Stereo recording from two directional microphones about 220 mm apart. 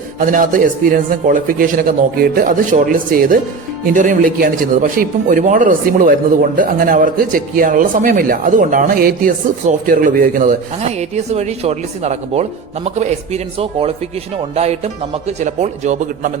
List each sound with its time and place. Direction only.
0.3 s a man's voice: 35° right (ahead or behind)